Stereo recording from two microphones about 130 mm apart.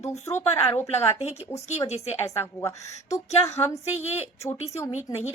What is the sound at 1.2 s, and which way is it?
Speech, 55° left (ahead or behind).